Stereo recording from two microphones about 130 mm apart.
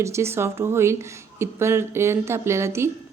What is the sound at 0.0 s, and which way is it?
A woman's voice, 20° right (ahead or behind).